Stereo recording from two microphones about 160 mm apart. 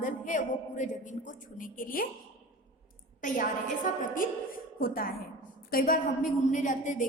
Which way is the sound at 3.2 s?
55° left (ahead or behind).